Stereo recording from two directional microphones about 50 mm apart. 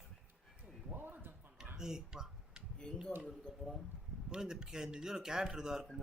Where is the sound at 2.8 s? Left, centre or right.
Centre.